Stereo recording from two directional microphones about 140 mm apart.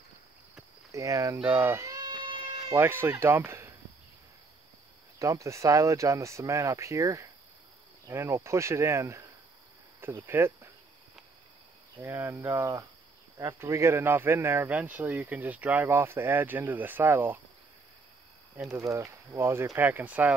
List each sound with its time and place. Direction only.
0.9 s speech: 20° right (ahead or behind)
1.4 s cat: 15° right (ahead or behind); by 2.5 s 35° right (ahead or behind)
2.7 s speech: 15° right (ahead or behind)
5.2 s speech: 20° right (ahead or behind)
12.0 s speech: 15° right (ahead or behind)
18.7 s speech: 20° right (ahead or behind)